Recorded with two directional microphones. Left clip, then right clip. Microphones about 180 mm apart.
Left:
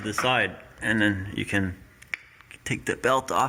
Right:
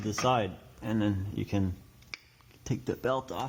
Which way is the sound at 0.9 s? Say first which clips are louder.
Left 9 dB; 30° left (ahead or behind).